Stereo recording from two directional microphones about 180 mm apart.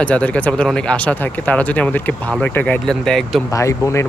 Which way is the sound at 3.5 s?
15° left (ahead or behind).